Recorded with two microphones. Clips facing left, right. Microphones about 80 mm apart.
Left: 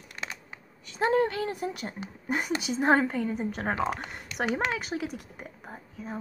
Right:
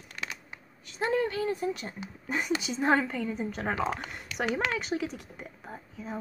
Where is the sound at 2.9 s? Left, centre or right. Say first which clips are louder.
Left 3 dB; centre.